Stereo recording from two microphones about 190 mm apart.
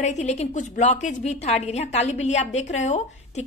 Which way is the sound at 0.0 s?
40° left (ahead or behind).